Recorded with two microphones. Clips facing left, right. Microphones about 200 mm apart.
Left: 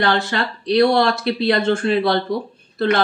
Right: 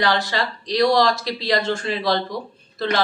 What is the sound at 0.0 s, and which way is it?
Speech, 60° left (ahead or behind).